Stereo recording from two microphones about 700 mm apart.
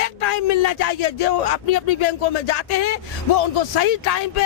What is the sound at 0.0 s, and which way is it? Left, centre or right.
Speech, left.